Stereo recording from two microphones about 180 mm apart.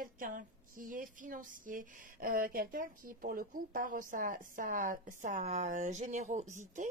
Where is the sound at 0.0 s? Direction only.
50° right (ahead or behind).